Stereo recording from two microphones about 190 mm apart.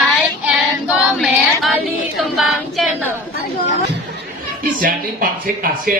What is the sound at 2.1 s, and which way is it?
Female singing, centre (ahead or behind).